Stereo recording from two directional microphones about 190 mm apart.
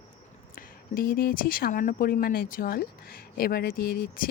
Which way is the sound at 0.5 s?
50° left (ahead or behind).